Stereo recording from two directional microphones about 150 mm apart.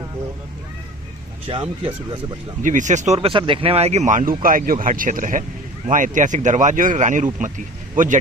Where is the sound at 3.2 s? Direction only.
35° right (ahead or behind).